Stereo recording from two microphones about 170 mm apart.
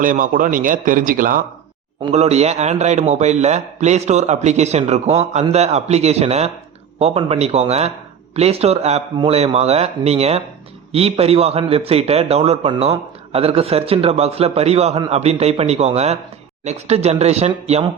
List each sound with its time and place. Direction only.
0.0 s a man's voice: 50° right (ahead or behind)
2.1 s a man's voice: 40° right (ahead or behind)